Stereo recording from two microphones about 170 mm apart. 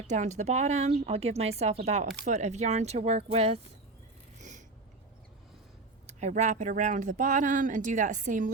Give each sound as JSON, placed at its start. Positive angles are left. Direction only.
{"t": 0.1, "sound": "speech", "side_deg": -45}
{"t": 4.4, "sound": "a sound", "side_deg": -45}
{"t": 6.1, "sound": "speech", "side_deg": -45}